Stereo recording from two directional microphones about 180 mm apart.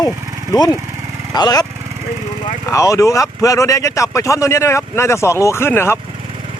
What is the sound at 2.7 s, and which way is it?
Speech, 15° left (ahead or behind).